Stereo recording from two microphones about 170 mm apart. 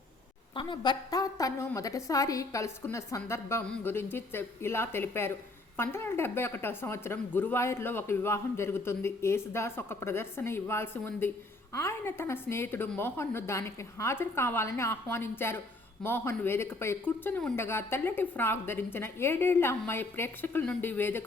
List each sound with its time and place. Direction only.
0.5 s a woman's voice: 30° left (ahead or behind)